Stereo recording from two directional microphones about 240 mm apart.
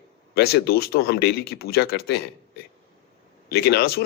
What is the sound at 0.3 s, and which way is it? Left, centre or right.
A man's voice, left.